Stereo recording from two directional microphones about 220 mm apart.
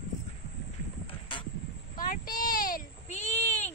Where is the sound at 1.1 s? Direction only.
25° left (ahead or behind).